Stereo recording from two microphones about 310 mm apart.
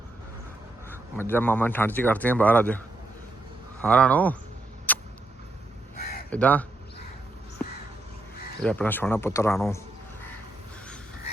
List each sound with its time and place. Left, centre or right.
0.9 s speech: centre
3.8 s speech: centre
4.9 s vehicle: centre
6.0 s a sound: left
6.3 s speech: centre
8.6 s speech: centre